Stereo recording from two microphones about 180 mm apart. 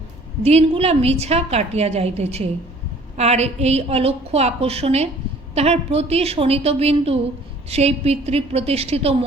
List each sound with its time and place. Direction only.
0.4 s a woman's voice: 35° right (ahead or behind)